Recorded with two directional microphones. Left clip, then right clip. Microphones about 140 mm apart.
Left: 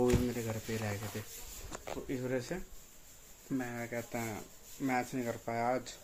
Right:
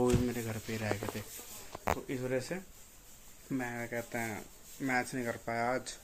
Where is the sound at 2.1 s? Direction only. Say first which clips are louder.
Right 1 dB; 10° right (ahead or behind).